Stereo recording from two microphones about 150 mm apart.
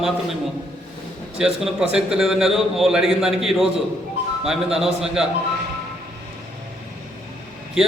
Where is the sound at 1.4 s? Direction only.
5° right (ahead or behind).